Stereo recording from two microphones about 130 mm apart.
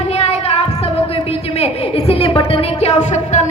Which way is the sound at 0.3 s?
50° left (ahead or behind).